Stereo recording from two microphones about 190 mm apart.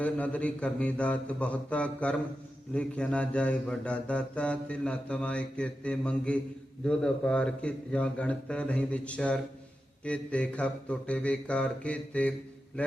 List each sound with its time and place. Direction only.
0.0 s a man's voice: 5° left (ahead or behind)
2.7 s mantra: 5° left (ahead or behind)
6.8 s a man's voice: 5° left (ahead or behind)